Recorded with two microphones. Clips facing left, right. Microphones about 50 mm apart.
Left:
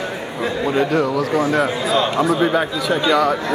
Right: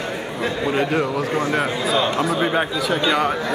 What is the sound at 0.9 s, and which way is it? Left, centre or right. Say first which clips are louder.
Speech: left 3 dB; right.